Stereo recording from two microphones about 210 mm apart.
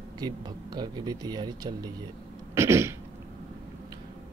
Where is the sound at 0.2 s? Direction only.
20° right (ahead or behind).